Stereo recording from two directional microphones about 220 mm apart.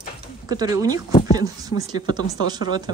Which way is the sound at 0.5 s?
15° right (ahead or behind).